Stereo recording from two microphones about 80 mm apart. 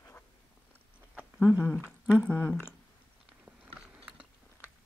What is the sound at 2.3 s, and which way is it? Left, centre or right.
Speech, left.